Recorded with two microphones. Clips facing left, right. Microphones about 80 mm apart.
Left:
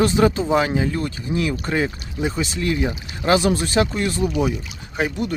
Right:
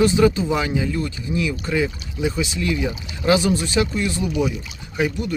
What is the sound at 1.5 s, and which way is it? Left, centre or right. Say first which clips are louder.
Speech: even; left.